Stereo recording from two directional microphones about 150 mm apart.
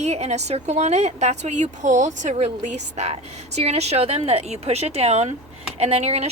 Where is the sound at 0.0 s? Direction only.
45° right (ahead or behind).